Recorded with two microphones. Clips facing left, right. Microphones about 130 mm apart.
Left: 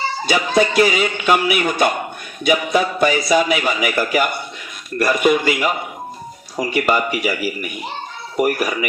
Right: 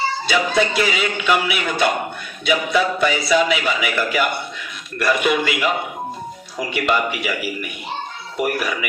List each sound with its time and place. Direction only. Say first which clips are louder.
0.3 s a man's voice: left 3 dB; 45° left (ahead or behind)